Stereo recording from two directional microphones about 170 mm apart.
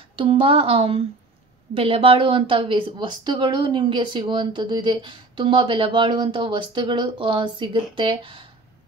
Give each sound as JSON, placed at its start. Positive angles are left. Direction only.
{"t": 0.1, "sound": "a woman's voice", "side_deg": -30}